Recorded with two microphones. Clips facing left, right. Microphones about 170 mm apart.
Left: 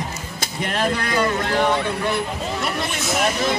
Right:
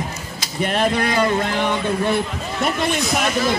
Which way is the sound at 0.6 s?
25° right (ahead or behind).